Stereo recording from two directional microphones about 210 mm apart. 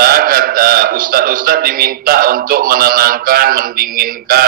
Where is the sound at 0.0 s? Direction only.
45° right (ahead or behind).